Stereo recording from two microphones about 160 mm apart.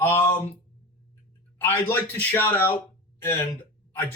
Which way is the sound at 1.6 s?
15° left (ahead or behind).